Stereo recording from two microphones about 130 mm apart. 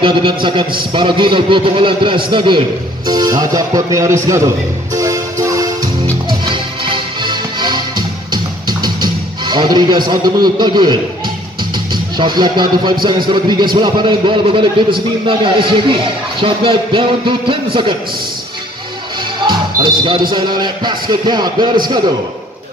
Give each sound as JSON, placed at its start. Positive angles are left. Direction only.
{"t": 0.0, "sound": "speech", "side_deg": -40}
{"t": 4.9, "sound": "train", "side_deg": -25}
{"t": 6.4, "sound": "music", "side_deg": -40}
{"t": 11.9, "sound": "speech", "side_deg": -35}
{"t": 19.4, "sound": "speech", "side_deg": -35}